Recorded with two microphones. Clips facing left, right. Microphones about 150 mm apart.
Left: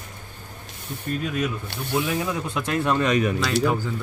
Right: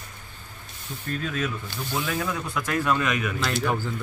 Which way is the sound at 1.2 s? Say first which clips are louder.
Left 2 dB; 15° left (ahead or behind).